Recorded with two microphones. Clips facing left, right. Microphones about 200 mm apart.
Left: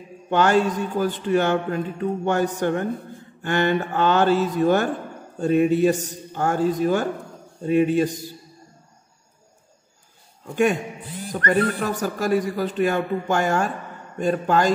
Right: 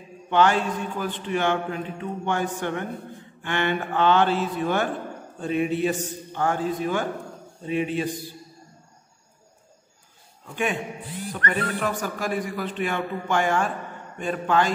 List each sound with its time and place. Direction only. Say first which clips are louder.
0.3 s a man's voice: left 2 dB; 45° left (ahead or behind)
10.5 s a man's voice: left 7 dB; 45° left (ahead or behind)